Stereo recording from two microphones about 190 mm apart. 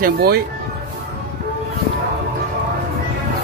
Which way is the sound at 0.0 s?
55° right (ahead or behind).